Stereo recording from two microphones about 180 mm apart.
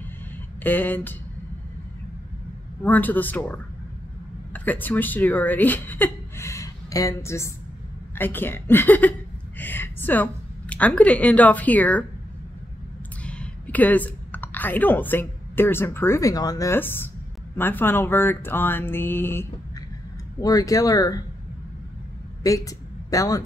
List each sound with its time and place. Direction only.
0.6 s speech: 10° left (ahead or behind)
2.8 s a woman's voice: 10° left (ahead or behind)
13.2 s a woman's voice: 5° left (ahead or behind)
22.4 s speech: 20° left (ahead or behind)